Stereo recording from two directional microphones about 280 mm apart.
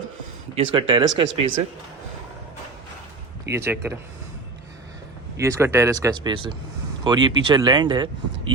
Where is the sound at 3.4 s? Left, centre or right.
Centre.